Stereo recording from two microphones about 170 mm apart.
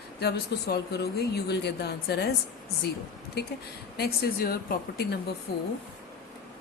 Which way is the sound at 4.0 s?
60° left (ahead or behind).